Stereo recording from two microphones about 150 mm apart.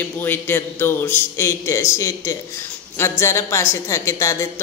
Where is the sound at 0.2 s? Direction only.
15° left (ahead or behind).